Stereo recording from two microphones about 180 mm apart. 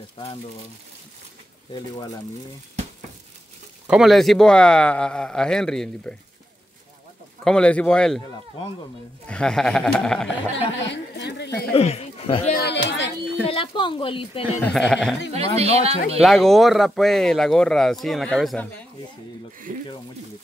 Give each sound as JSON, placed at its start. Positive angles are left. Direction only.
{"t": 1.7, "sound": "speech", "side_deg": 20}
{"t": 3.8, "sound": "speech", "side_deg": -5}
{"t": 7.4, "sound": "speech", "side_deg": 5}
{"t": 9.3, "sound": "speech", "side_deg": 5}
{"t": 10.8, "sound": "a sound", "side_deg": 75}
{"t": 11.7, "sound": "speech", "side_deg": 35}
{"t": 12.6, "sound": "speech", "side_deg": 80}
{"t": 13.5, "sound": "speech", "side_deg": 30}
{"t": 14.6, "sound": "speech", "side_deg": 5}
{"t": 15.3, "sound": "speech", "side_deg": -35}
{"t": 16.2, "sound": "speech", "side_deg": 0}
{"t": 19.7, "sound": "speech", "side_deg": -50}